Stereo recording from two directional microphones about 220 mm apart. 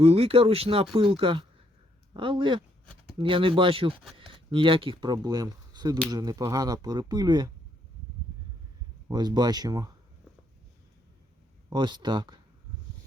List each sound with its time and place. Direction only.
0.0 s speech: 25° right (ahead or behind)
9.0 s speech: 20° right (ahead or behind)
11.7 s speech: 20° right (ahead or behind)